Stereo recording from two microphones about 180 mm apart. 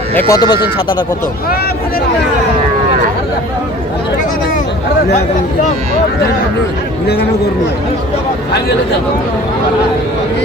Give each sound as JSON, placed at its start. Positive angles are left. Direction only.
{"t": 0.1, "sound": "speech", "side_deg": 10}
{"t": 0.3, "sound": "speech", "side_deg": 25}